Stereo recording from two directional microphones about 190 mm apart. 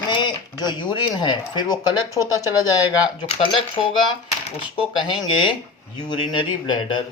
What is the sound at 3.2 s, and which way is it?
Speech, 25° left (ahead or behind).